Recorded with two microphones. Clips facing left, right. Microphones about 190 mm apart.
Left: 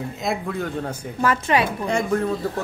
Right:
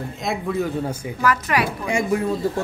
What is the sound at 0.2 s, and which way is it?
Speech, centre (ahead or behind).